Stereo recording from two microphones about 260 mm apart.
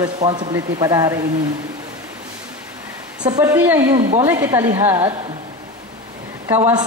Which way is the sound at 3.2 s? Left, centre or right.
Centre.